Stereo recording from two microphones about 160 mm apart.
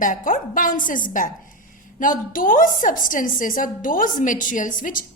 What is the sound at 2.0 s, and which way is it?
A woman's voice, 60° left (ahead or behind).